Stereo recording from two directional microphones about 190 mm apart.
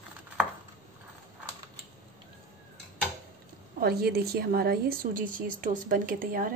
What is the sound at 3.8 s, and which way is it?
A woman's voice, 55° right (ahead or behind).